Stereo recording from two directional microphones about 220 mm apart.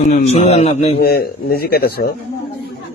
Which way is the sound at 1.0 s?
45° left (ahead or behind).